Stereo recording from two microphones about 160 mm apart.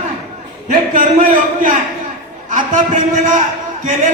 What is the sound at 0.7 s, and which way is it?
A man's voice, 55° right (ahead or behind).